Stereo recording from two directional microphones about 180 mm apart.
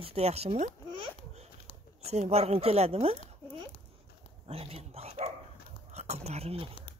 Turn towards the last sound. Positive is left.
turn(degrees=-35)  # may be behind; listen again after turning